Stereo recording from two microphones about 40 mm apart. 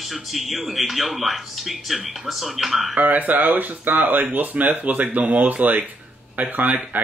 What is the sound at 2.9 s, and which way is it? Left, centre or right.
Speech, right.